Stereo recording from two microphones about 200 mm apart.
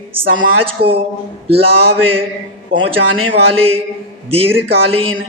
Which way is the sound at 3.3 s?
30° right (ahead or behind).